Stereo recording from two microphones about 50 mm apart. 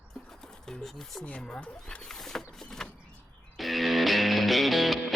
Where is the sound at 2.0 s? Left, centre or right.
Centre.